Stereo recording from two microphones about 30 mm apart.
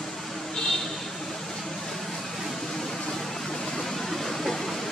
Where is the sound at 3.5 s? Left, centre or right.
Centre.